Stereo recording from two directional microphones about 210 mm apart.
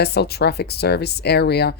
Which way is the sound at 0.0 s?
50° left (ahead or behind).